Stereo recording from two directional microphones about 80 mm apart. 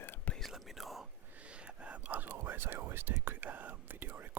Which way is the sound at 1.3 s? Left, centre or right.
Centre.